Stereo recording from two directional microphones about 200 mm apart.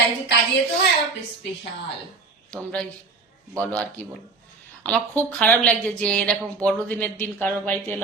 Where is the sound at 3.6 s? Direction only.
5° left (ahead or behind).